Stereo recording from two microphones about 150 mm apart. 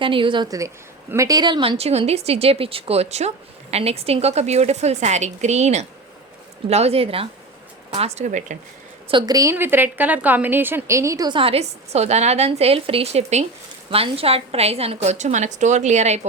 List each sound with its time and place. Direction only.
0.0 s speech: 35° right (ahead or behind); by 8.5 s 55° right (ahead or behind)
9.0 s a woman's voice: 30° right (ahead or behind); by 16.2 s 50° right (ahead or behind)